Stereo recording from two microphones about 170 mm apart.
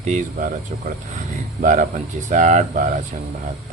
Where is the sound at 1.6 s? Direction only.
50° right (ahead or behind).